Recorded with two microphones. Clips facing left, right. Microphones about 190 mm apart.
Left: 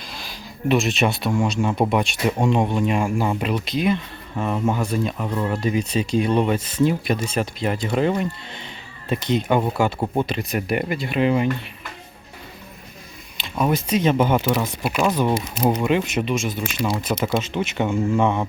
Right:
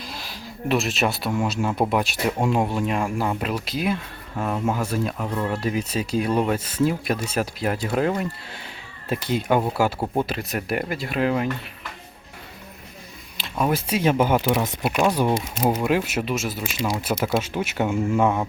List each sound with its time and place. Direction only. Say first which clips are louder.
0.1 s speech: right 1 dB; 5° right (ahead or behind)
13.4 s speech: left 2 dB; 5° right (ahead or behind)
14.6 s speech: even; 20° right (ahead or behind)
14.8 s speech: even; centre (ahead or behind)